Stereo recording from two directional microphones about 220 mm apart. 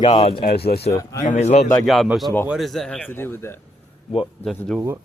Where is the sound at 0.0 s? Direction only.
25° left (ahead or behind).